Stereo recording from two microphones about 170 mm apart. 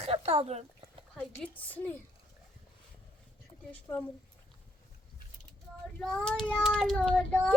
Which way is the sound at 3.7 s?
10° left (ahead or behind).